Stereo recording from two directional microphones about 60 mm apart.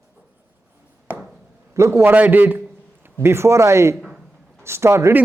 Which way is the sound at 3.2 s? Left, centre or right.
Right.